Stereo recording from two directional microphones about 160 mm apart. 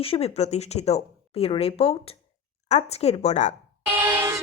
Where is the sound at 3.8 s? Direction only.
10° right (ahead or behind).